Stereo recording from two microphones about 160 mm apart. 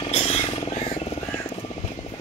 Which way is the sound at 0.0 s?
35° left (ahead or behind).